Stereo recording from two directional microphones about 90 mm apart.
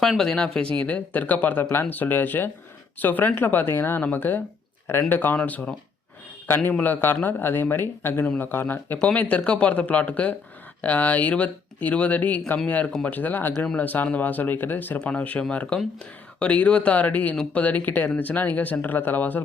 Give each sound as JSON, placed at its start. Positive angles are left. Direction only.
{"t": 0.0, "sound": "a man's voice", "side_deg": 5}